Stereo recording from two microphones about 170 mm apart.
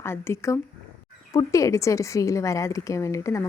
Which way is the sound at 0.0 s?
15° left (ahead or behind).